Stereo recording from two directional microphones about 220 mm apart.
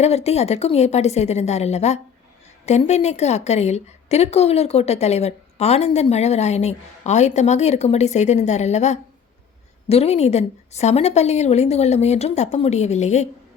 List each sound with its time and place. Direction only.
0.0 s a woman's voice: 30° left (ahead or behind)